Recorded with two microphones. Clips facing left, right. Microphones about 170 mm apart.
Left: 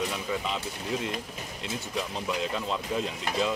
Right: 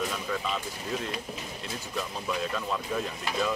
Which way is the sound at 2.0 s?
20° left (ahead or behind).